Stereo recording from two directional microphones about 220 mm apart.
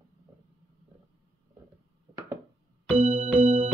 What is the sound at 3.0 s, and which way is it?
Music, 25° right (ahead or behind).